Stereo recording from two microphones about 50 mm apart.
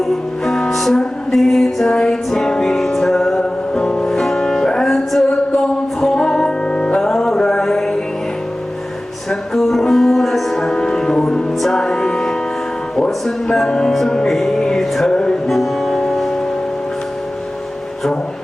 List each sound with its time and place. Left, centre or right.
0.0 s music: centre
7.0 s music: centre
9.3 s music: centre
13.0 s speech: centre
13.7 s music: centre
15.4 s music: centre